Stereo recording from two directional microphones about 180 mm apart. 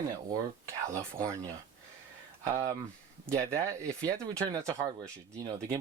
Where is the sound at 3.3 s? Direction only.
15° right (ahead or behind).